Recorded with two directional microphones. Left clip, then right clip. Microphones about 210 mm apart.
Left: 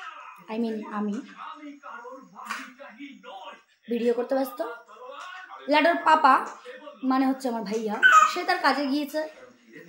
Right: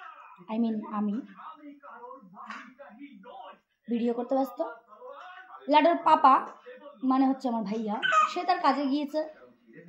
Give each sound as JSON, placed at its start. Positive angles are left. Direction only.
{"t": 0.5, "sound": "speech", "side_deg": 10}
{"t": 3.9, "sound": "speech", "side_deg": 10}
{"t": 5.7, "sound": "speech", "side_deg": 10}